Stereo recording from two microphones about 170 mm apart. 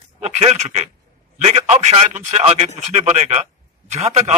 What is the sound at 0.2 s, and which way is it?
A man's voice, 40° right (ahead or behind).